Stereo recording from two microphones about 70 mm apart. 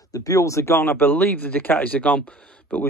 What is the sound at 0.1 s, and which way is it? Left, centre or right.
Speech, left.